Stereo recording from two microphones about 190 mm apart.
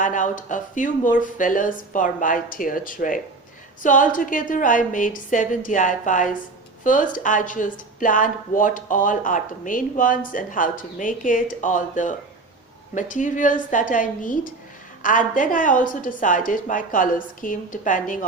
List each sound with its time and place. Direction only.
0.0 s speech: 45° left (ahead or behind)